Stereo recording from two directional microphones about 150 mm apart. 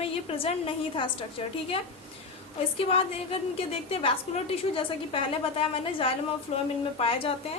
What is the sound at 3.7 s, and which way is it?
A woman's voice, 40° left (ahead or behind).